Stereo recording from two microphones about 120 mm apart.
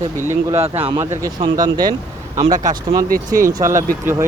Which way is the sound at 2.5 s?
90° right.